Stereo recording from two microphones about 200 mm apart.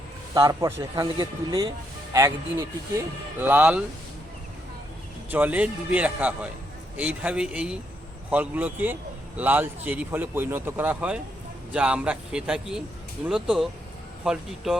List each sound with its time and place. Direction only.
0.3 s speech: 20° right (ahead or behind)
5.3 s a man's voice: 10° right (ahead or behind)